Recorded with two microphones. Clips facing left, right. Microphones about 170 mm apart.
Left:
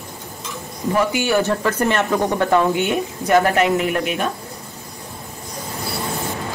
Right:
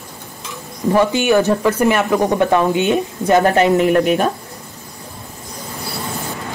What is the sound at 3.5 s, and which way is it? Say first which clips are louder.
Speech: right 5 dB; 35° right (ahead or behind).